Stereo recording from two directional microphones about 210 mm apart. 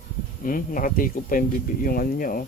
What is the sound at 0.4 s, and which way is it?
Speech, 40° left (ahead or behind).